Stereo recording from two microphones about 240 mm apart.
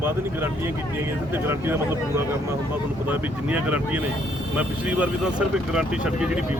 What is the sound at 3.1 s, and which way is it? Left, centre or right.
Speech, centre.